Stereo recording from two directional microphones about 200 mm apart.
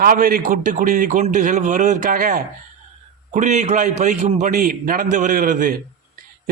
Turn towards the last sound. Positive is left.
turn(degrees=-45)  # may be behind; listen again after turning